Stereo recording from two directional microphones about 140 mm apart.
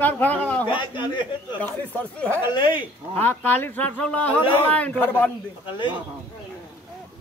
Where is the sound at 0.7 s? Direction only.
35° left (ahead or behind).